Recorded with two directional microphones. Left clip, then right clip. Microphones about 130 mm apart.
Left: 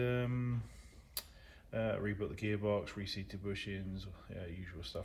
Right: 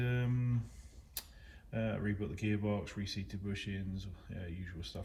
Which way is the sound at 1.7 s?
40° left (ahead or behind).